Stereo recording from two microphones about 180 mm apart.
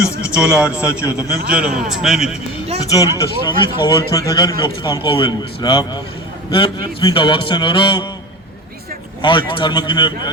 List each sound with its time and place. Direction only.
0.3 s a man's voice: 5° right (ahead or behind)
2.9 s a man's voice: 15° left (ahead or behind)
7.0 s a man's voice: 30° left (ahead or behind)
9.2 s a man's voice: 25° left (ahead or behind)